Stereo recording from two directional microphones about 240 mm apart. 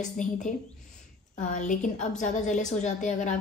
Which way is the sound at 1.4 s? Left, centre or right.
Left.